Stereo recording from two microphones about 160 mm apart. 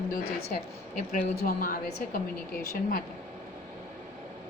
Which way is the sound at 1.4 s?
60° left (ahead or behind).